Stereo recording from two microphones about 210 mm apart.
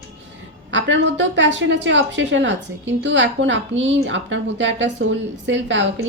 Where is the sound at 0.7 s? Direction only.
60° right (ahead or behind).